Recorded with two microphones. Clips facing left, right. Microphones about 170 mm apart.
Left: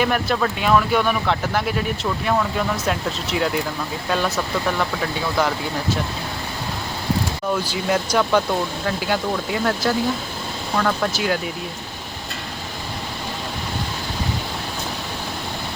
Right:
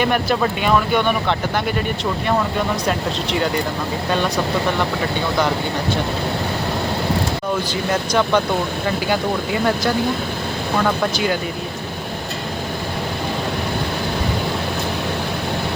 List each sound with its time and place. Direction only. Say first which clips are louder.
0.0 s speech: right 2 dB; centre (ahead or behind)
2.8 s speech: right 3 dB; 5° left (ahead or behind)
7.7 s speech: right 1 dB; 10° left (ahead or behind)
11.1 s speech: right 2 dB; centre (ahead or behind)